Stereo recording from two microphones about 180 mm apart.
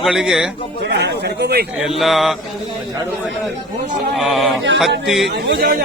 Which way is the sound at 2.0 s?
Centre (ahead or behind).